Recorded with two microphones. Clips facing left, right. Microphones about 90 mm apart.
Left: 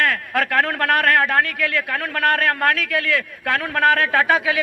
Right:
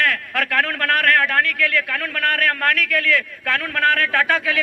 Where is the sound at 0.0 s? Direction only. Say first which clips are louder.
Left 1 dB; 15° left (ahead or behind).